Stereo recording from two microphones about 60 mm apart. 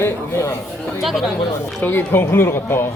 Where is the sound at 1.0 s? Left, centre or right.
Centre.